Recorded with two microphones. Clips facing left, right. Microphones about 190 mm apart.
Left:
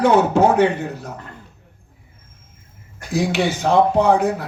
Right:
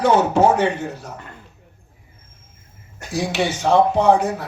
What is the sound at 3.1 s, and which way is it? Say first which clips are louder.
Speech: left 2 dB; 60° left (ahead or behind).